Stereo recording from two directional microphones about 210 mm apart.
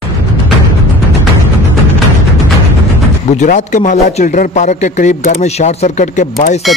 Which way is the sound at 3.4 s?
35° left (ahead or behind).